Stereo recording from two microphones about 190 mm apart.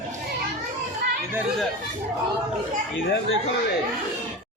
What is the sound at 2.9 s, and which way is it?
Speech, 90° left.